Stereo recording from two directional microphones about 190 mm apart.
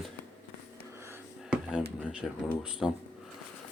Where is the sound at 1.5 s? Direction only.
5° right (ahead or behind).